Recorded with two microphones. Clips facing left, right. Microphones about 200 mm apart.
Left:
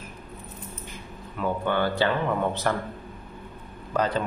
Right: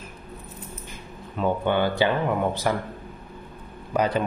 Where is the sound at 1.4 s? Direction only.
15° right (ahead or behind).